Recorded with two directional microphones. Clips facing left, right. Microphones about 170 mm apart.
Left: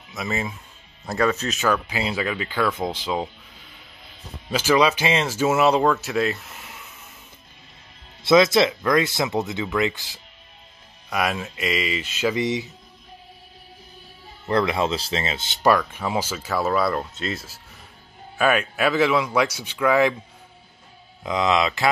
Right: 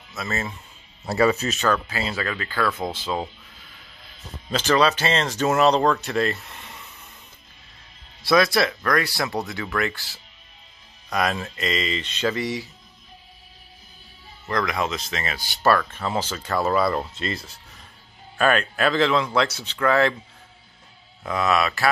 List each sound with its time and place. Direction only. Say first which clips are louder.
0.1 s speech: left 2 dB; 15° left (ahead or behind)
1.0 s speech: right 2 dB; 5° right (ahead or behind)
1.6 s speech: left 1 dB; 15° left (ahead or behind)
4.5 s speech: left 1 dB; 10° left (ahead or behind)
8.2 s speech: left 3 dB; 20° left (ahead or behind)
12.4 s speech: left 3 dB; 20° left (ahead or behind)
14.5 s speech: left 4 dB; 30° left (ahead or behind); by 20.2 s 10° left (ahead or behind)
21.2 s speech: left 1 dB; 15° left (ahead or behind)